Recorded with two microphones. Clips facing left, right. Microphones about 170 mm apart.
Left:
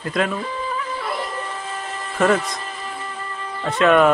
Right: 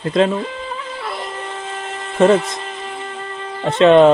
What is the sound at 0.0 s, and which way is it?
Speech, 25° right (ahead or behind).